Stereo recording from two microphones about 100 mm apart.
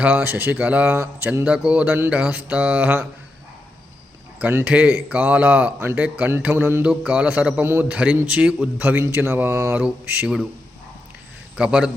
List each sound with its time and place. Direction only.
0.0 s speech: 15° right (ahead or behind)
4.4 s speech: 15° right (ahead or behind)
6.8 s speech: 10° right (ahead or behind); by 9.7 s 25° right (ahead or behind)
9.7 s speech: 15° right (ahead or behind)
11.5 s speech: 10° right (ahead or behind)